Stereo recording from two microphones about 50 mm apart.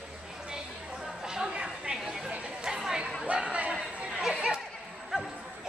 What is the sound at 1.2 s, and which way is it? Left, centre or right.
Chatter, centre.